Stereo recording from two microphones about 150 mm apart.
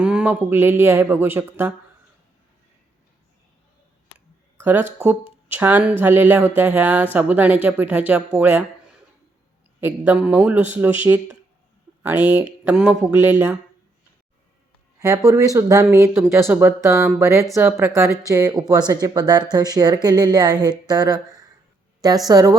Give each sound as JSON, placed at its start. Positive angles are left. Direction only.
{"t": 0.0, "sound": "speech", "side_deg": -10}
{"t": 4.6, "sound": "speech", "side_deg": -15}
{"t": 12.1, "sound": "speech", "side_deg": -50}
{"t": 12.6, "sound": "speech", "side_deg": -10}
{"t": 15.0, "sound": "speech", "side_deg": -20}
{"t": 22.3, "sound": "speech", "side_deg": -25}